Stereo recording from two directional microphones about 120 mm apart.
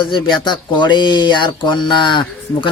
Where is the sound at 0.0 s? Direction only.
40° left (ahead or behind).